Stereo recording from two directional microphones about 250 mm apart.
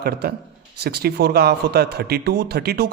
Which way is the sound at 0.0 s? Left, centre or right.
Right.